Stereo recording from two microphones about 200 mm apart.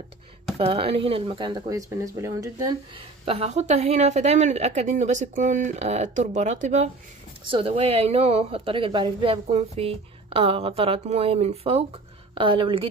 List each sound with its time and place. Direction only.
0.6 s a woman's voice: 30° right (ahead or behind)
3.3 s a woman's voice: 30° right (ahead or behind)